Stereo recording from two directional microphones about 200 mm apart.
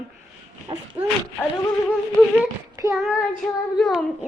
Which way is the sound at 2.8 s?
15° right (ahead or behind).